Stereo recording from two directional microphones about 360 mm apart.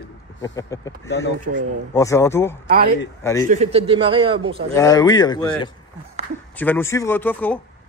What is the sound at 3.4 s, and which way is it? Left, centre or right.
A man's voice, centre.